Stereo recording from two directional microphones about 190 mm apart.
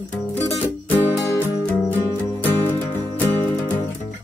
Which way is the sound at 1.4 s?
10° left (ahead or behind).